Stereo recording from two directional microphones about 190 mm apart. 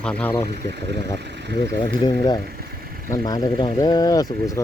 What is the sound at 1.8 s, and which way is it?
Speech, 25° left (ahead or behind).